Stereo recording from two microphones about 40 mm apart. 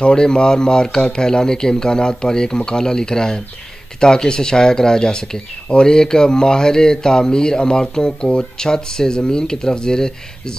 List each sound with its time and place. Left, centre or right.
0.0 s speech: centre